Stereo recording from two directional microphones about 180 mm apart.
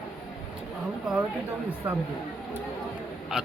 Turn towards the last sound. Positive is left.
turn(degrees=0)  # may be behind; listen again after turning